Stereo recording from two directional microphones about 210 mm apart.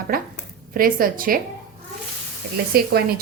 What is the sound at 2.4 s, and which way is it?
Speech, 50° right (ahead or behind).